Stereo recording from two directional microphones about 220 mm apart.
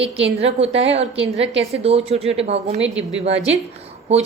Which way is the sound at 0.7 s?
55° right (ahead or behind).